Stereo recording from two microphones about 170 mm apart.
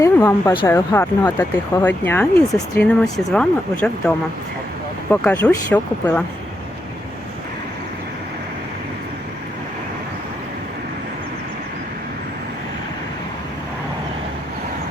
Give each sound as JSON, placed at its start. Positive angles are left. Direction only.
{"t": 0.0, "sound": "a woman's voice", "side_deg": 15}
{"t": 5.1, "sound": "speech", "side_deg": 10}